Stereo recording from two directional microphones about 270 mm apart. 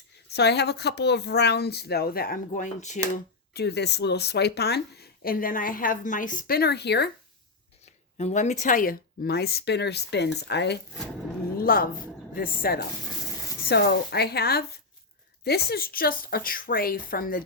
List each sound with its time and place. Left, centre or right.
0.3 s speech: left
3.5 s speech: left
8.2 s speech: left
11.5 s a sound: left
12.3 s speech: left